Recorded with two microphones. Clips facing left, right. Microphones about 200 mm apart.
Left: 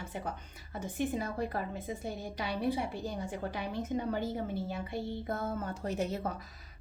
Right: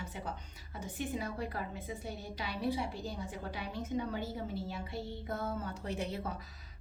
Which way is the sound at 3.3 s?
50° left (ahead or behind).